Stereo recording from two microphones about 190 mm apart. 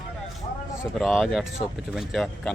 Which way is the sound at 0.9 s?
Centre (ahead or behind).